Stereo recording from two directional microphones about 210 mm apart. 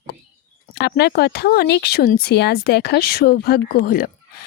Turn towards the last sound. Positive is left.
turn(degrees=45)  # may be behind; listen again after turning